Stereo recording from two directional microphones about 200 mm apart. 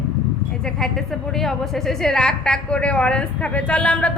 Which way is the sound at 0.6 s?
Centre (ahead or behind).